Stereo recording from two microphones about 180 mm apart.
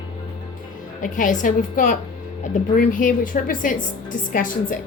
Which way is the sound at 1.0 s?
45° left (ahead or behind).